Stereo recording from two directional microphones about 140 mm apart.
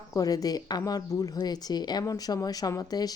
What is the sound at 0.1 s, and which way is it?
Speech, 25° left (ahead or behind).